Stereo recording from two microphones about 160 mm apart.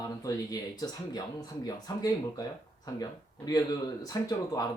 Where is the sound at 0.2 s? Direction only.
25° left (ahead or behind).